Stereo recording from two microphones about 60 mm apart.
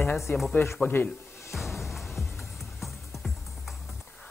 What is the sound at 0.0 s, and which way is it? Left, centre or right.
Speech, centre.